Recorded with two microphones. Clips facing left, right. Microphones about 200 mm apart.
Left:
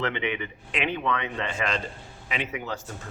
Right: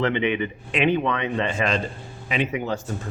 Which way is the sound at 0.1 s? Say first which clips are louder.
Right 7 dB; 20° right (ahead or behind).